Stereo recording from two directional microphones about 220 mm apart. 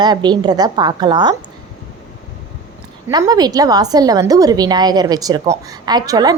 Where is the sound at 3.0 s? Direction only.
15° right (ahead or behind).